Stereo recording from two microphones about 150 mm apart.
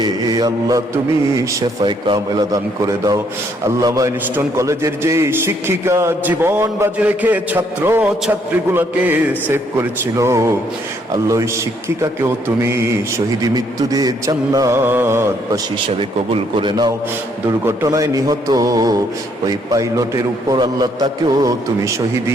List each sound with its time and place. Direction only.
0.0 s mantra: 25° right (ahead or behind)
1.4 s a man's voice: 30° right (ahead or behind)
12.0 s a man's voice: 15° right (ahead or behind)
16.0 s a man's voice: 35° right (ahead or behind)